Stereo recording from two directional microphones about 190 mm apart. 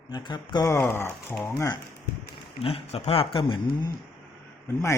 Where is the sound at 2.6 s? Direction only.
30° left (ahead or behind).